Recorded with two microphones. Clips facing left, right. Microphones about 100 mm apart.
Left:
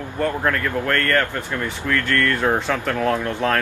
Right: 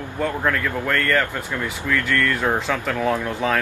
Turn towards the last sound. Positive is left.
turn(degrees=-5)  # may be behind; listen again after turning